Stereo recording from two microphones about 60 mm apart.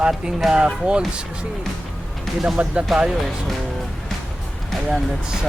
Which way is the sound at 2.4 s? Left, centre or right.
Centre.